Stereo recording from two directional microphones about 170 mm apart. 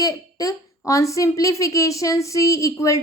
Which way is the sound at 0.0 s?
20° left (ahead or behind).